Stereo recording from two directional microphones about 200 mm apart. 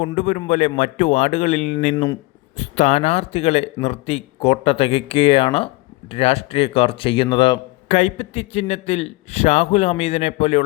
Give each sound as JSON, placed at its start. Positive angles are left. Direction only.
{"t": 0.1, "sound": "a man's voice", "side_deg": 35}
{"t": 7.9, "sound": "a man's voice", "side_deg": 35}